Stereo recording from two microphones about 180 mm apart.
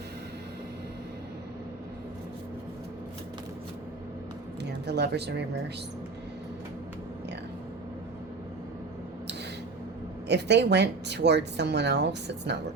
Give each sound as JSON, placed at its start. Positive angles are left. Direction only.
{"t": 4.9, "sound": "speech", "side_deg": -70}
{"t": 10.2, "sound": "speech", "side_deg": -70}